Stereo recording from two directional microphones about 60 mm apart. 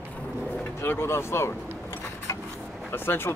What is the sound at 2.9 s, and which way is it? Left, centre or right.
Speech, left.